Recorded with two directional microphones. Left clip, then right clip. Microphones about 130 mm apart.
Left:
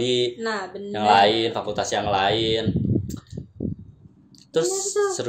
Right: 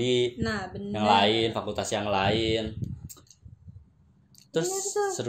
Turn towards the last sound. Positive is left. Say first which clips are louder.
# left 5 dB
turn(degrees=-35)  # may be behind; listen again after turning